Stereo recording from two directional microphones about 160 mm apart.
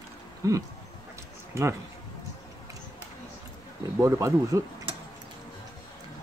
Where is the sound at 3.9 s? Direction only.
15° right (ahead or behind).